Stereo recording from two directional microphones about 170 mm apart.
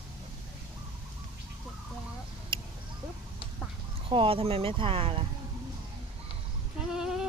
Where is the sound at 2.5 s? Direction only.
30° right (ahead or behind).